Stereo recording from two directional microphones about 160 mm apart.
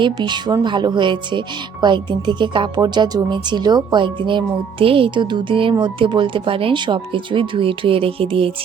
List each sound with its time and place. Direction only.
0.0 s speech: 25° right (ahead or behind)